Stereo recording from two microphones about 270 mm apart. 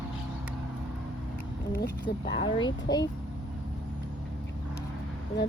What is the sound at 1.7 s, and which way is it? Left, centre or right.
Speech, left.